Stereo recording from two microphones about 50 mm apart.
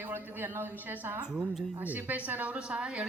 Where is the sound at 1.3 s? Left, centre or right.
Centre.